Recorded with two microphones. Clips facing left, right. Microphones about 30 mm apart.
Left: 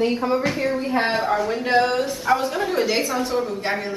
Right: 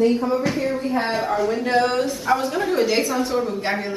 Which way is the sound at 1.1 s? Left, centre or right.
Centre.